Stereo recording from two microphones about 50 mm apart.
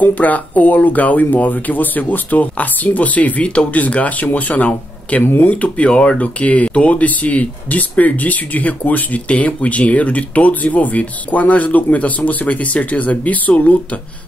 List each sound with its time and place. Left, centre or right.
0.0 s speech: left
5.2 s speech: left